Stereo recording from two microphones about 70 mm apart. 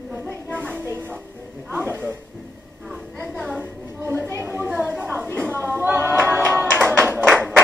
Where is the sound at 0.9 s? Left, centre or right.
Right.